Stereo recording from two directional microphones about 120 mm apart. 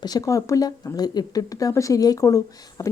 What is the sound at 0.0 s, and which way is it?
A woman's voice, 30° left (ahead or behind).